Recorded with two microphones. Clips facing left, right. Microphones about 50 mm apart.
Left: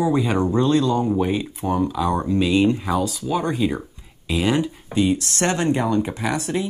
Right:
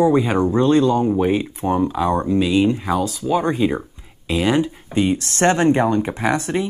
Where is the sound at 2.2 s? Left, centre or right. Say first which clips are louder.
Even; centre.